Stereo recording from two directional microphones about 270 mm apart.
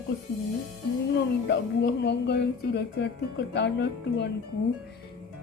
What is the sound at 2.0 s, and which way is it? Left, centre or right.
Speech, left.